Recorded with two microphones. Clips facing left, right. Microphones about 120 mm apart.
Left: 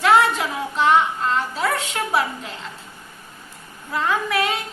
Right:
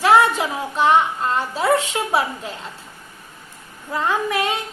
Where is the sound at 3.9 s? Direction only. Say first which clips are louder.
Right 1 dB; 25° right (ahead or behind).